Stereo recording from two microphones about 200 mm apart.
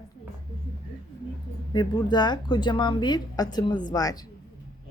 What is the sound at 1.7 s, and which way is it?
A woman's voice, 20° left (ahead or behind).